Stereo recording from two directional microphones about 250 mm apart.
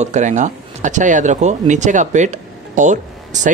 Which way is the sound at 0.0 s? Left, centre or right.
Right.